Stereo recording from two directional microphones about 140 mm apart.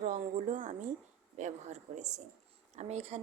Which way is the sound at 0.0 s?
60° right (ahead or behind).